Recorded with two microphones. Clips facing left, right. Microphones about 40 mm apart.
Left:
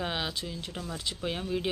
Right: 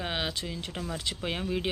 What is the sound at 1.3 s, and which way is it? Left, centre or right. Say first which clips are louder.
Speech: even; right.